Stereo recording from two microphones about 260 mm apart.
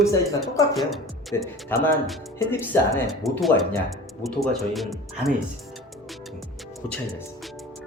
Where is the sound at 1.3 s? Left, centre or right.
Centre.